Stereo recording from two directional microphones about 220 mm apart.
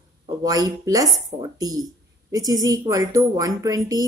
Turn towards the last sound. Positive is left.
turn(degrees=-15)  # may be behind; listen again after turning